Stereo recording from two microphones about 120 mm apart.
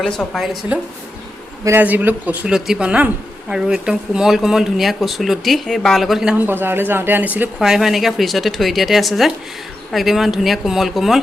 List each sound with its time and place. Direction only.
0.0 s a woman's voice: 5° left (ahead or behind)
1.6 s speech: 15° right (ahead or behind)
6.3 s speech: 15° right (ahead or behind)
7.6 s speech: centre (ahead or behind)